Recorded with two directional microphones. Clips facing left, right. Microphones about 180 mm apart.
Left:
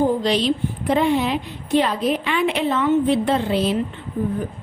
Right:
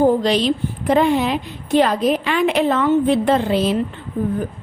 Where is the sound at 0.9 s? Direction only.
45° right (ahead or behind).